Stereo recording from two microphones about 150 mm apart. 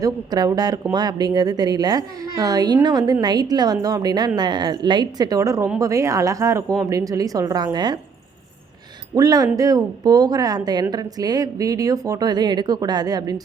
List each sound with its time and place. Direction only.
0.0 s a woman's voice: 25° right (ahead or behind)
9.1 s a woman's voice: 25° right (ahead or behind)